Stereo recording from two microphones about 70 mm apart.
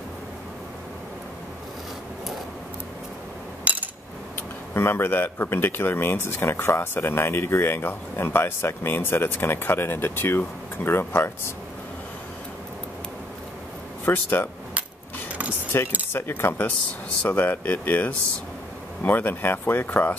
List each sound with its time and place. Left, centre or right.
3.6 s a sound: right
4.7 s speech: left
14.0 s speech: left
15.7 s speech: left